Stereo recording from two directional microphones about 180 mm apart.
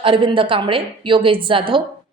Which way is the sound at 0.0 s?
30° right (ahead or behind).